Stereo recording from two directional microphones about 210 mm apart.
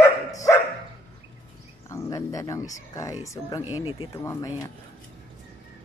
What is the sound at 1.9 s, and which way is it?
Speech, 15° left (ahead or behind).